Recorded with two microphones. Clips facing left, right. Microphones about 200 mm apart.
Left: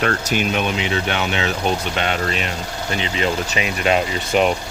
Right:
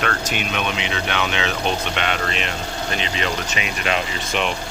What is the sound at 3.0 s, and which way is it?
Speech, 30° left (ahead or behind).